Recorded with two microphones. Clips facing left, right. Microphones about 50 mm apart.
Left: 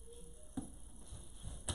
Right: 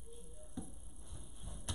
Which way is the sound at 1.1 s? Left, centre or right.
Centre.